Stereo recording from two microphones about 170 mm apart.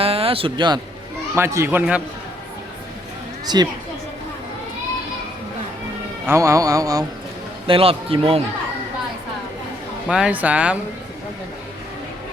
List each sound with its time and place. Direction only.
0.0 s speech: 35° right (ahead or behind)
1.4 s speech: 15° right (ahead or behind)
3.4 s a woman's voice: 25° right (ahead or behind)
6.2 s music: 15° right (ahead or behind)
7.7 s a man's voice: 35° right (ahead or behind)
10.1 s speech: 5° right (ahead or behind)